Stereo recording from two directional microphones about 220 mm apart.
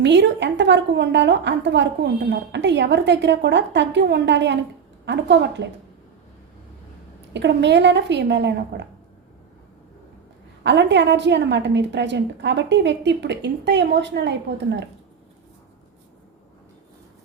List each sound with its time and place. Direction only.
0.0 s a woman's voice: 55° right (ahead or behind)
7.3 s a woman's voice: 55° right (ahead or behind)
10.6 s a woman's voice: 55° right (ahead or behind)